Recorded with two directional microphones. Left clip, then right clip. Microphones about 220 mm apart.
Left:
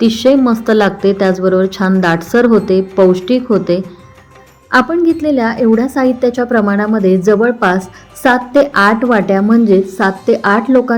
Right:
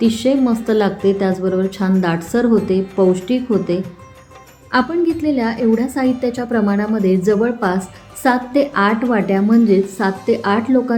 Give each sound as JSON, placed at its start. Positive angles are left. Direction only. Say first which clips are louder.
{"t": 0.0, "sound": "a woman's voice", "louder": "left 6 dB", "side_deg": 15}